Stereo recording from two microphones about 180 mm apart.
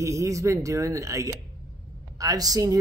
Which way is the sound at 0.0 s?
15° right (ahead or behind).